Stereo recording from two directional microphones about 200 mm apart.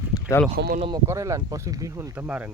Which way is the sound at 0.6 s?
50° right (ahead or behind).